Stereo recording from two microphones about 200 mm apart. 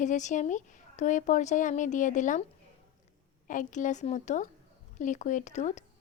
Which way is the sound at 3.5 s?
40° left (ahead or behind).